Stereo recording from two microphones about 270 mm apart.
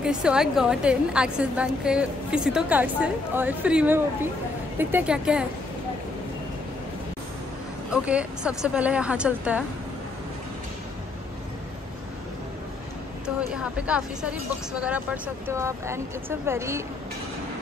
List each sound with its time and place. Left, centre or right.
0.0 s a woman's voice: centre
7.9 s a woman's voice: centre
13.5 s a woman's voice: centre